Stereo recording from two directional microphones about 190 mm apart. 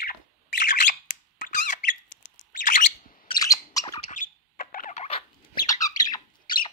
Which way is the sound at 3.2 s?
20° left (ahead or behind).